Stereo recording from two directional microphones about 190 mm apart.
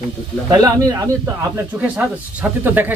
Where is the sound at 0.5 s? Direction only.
20° right (ahead or behind).